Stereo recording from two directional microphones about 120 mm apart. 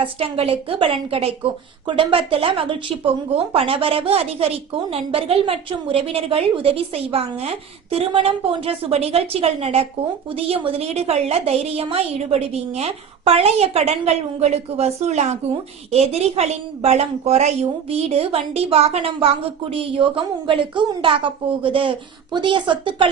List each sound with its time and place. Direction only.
0.0 s a woman's voice: 50° right (ahead or behind)